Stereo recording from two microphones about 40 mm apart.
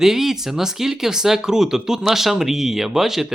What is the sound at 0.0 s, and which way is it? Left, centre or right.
Speech, centre.